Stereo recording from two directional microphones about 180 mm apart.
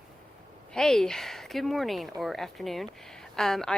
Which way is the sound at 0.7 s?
5° left (ahead or behind).